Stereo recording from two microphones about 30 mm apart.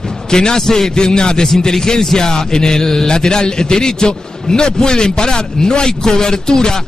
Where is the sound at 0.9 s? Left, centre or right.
Left.